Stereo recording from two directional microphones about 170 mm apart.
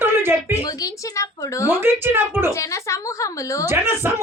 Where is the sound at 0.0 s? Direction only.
15° right (ahead or behind).